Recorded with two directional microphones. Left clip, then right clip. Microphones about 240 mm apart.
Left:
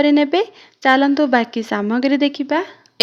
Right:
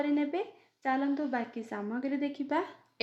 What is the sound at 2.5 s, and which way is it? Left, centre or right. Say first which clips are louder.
Speech: left 12 dB; left.